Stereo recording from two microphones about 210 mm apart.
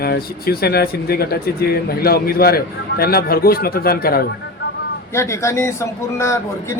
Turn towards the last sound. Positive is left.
turn(degrees=15)  # may be behind; listen again after turning